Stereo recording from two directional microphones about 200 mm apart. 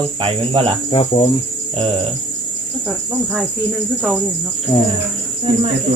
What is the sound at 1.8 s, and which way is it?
Cricket, 25° right (ahead or behind).